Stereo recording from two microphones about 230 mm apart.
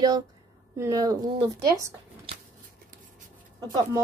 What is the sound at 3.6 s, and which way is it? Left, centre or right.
Speech, centre.